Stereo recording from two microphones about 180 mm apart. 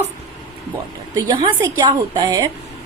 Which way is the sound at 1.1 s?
25° right (ahead or behind).